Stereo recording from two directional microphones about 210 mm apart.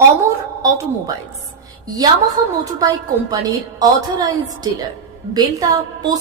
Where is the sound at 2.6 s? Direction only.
15° right (ahead or behind).